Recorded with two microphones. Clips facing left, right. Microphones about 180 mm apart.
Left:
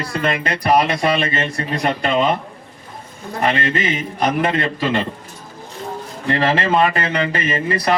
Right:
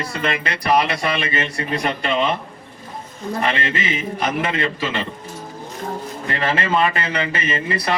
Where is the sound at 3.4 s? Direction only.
40° left (ahead or behind).